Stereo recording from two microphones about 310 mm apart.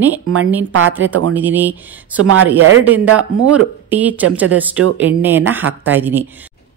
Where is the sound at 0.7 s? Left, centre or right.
Right.